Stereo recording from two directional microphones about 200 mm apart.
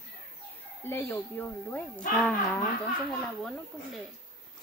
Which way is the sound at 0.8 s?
10° left (ahead or behind).